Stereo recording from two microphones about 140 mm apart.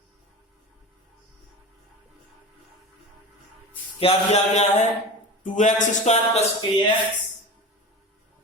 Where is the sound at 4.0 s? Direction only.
50° left (ahead or behind).